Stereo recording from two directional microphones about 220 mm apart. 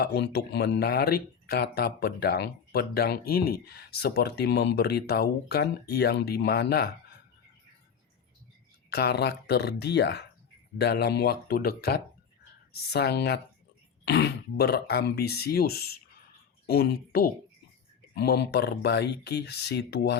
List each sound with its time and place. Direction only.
0.0 s speech: 45° left (ahead or behind)
8.9 s speech: 50° left (ahead or behind)